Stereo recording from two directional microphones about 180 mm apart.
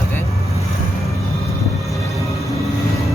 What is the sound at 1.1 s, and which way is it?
Vehicle, 15° left (ahead or behind).